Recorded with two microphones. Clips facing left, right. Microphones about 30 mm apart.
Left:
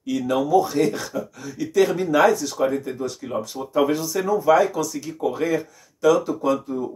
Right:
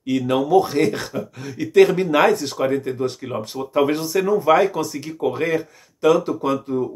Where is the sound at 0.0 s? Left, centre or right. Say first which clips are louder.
Right 2 dB; right.